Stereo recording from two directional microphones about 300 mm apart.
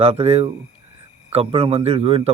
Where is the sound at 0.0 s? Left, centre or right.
Centre.